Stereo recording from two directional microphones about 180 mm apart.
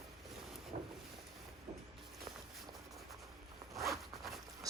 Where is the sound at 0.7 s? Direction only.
50° right (ahead or behind).